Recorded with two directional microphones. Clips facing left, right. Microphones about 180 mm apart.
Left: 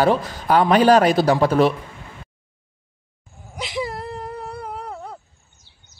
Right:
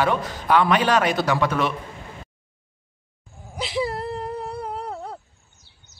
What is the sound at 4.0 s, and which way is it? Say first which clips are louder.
Humming: right 2 dB; 10° left (ahead or behind).